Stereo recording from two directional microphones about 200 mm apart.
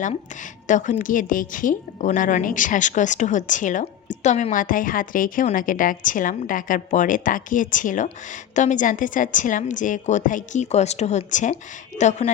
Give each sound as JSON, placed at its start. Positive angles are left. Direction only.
{"t": 0.7, "sound": "a woman's voice", "side_deg": 40}